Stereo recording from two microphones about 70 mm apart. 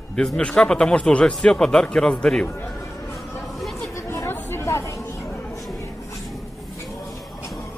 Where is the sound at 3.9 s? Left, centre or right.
Left.